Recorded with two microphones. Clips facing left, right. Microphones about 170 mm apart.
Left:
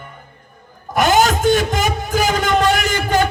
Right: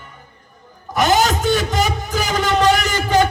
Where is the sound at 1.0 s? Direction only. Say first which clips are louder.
Left 2 dB; 50° left (ahead or behind).